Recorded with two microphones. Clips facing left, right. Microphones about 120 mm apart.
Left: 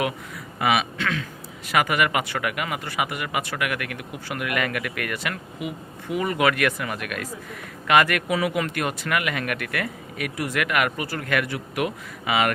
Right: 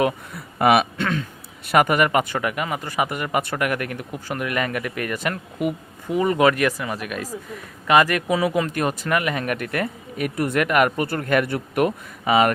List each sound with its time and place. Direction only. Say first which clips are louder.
0.6 s speech: right 5 dB; 45° right (ahead or behind); by 5.1 s 30° right (ahead or behind)
5.2 s speech: right 6 dB; 45° right (ahead or behind)
6.1 s speech: right 4 dB; 30° right (ahead or behind)